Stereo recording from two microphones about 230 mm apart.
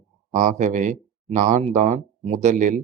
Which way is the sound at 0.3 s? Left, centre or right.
Right.